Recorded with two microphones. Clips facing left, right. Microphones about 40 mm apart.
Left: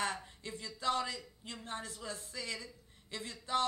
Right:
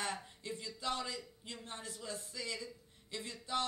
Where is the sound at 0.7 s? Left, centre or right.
Left.